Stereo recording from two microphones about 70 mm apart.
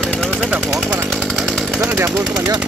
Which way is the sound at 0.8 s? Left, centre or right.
Right.